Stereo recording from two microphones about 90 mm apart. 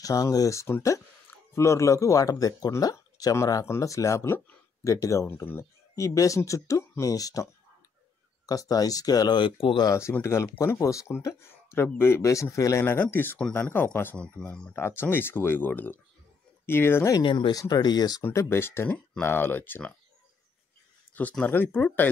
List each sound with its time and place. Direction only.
0.0 s speech: 40° left (ahead or behind)
5.9 s speech: 35° left (ahead or behind)
8.5 s speech: 45° left (ahead or behind)
9.4 s speech: 75° left (ahead or behind)
10.2 s speech: 30° left (ahead or behind)
12.8 s speech: 25° left (ahead or behind)
14.1 s speech: 10° left (ahead or behind)
14.8 s speech: 25° left (ahead or behind)
17.2 s speech: 70° left (ahead or behind)
17.5 s speech: 45° left (ahead or behind)
18.2 s speech: 30° left (ahead or behind)
21.1 s speech: 15° left (ahead or behind)